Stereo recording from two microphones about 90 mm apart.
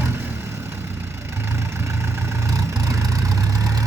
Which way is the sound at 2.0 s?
35° right (ahead or behind).